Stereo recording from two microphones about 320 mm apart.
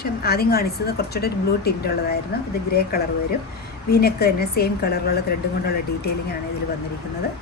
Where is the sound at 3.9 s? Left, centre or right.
Left.